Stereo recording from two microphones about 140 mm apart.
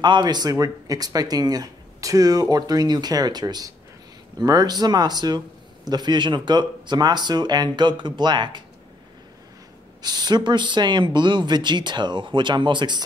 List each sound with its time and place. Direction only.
0.0 s speech: 30° right (ahead or behind)
10.0 s speech: 30° right (ahead or behind)